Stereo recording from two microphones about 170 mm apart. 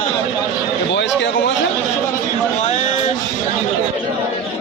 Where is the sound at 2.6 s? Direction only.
45° left (ahead or behind).